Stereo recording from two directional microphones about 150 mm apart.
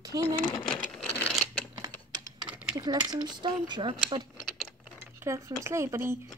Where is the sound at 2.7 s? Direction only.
25° right (ahead or behind).